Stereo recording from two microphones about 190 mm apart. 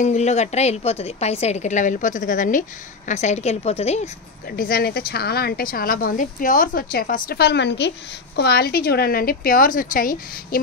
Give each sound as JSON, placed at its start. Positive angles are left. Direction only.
{"t": 0.0, "sound": "a woman's voice", "side_deg": 40}
{"t": 4.5, "sound": "a woman's voice", "side_deg": 50}